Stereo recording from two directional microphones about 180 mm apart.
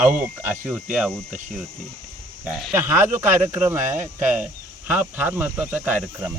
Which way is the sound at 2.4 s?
5° right (ahead or behind).